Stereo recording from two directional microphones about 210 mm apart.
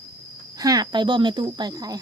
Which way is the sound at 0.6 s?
20° right (ahead or behind).